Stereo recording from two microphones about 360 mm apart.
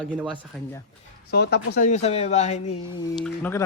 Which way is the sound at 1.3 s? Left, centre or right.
Left.